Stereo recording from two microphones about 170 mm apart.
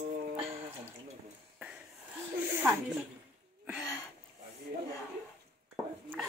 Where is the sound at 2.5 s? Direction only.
10° right (ahead or behind).